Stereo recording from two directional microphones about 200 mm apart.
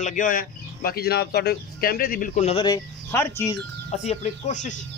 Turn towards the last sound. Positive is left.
turn(degrees=40)  # may be behind; listen again after turning